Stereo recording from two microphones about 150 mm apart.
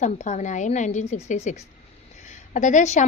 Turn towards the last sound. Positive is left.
turn(degrees=50)  # may be behind; listen again after turning